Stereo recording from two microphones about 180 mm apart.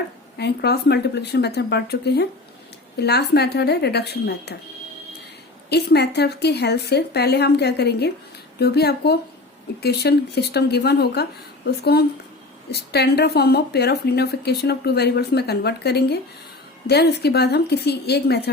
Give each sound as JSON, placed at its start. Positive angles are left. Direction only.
{"t": 0.3, "sound": "a woman's voice", "side_deg": 65}
{"t": 5.6, "sound": "a woman's voice", "side_deg": 65}